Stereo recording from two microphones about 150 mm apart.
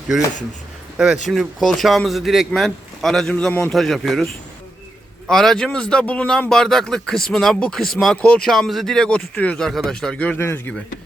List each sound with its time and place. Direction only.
0.9 s a man's voice: 5° right (ahead or behind)
5.3 s a man's voice: 5° left (ahead or behind)